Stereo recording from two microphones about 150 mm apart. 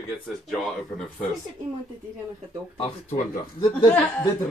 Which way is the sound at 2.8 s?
50° left (ahead or behind).